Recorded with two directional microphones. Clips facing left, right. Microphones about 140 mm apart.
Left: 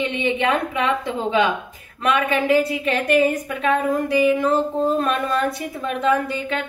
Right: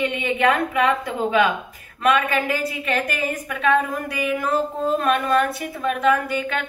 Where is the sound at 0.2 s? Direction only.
25° left (ahead or behind).